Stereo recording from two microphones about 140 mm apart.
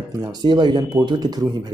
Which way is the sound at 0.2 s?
30° right (ahead or behind).